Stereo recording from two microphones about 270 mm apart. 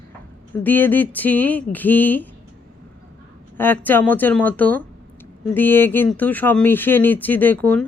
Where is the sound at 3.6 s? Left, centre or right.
Centre.